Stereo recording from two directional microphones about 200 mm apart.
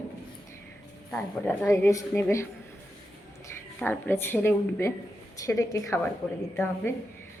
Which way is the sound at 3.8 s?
10° left (ahead or behind).